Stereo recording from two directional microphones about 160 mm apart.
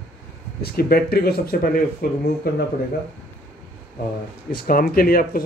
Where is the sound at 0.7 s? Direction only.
70° left (ahead or behind).